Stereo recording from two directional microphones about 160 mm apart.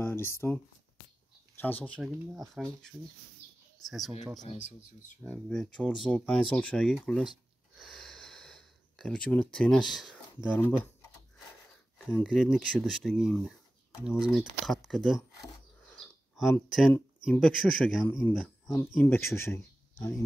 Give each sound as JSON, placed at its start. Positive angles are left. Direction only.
{"t": 0.0, "sound": "speech", "side_deg": 15}
{"t": 1.6, "sound": "speech", "side_deg": 10}
{"t": 2.0, "sound": "speech", "side_deg": 0}
{"t": 4.4, "sound": "speech", "side_deg": 50}
{"t": 5.2, "sound": "speech", "side_deg": 5}
{"t": 7.8, "sound": "a sound", "side_deg": 0}
{"t": 12.1, "sound": "speech", "side_deg": 5}
{"t": 15.8, "sound": "bird", "side_deg": 5}
{"t": 17.3, "sound": "speech", "side_deg": 5}
{"t": 18.2, "sound": "speech", "side_deg": 15}